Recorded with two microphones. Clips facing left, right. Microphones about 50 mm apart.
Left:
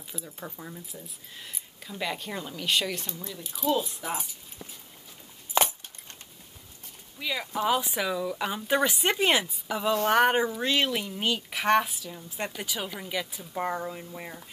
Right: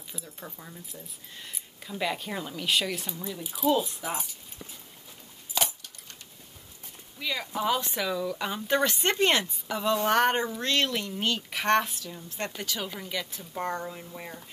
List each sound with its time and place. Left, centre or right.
0.1 s speech: centre
5.5 s a sound: left
7.2 s speech: centre